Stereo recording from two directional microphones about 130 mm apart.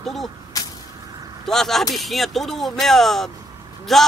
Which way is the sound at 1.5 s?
Centre (ahead or behind).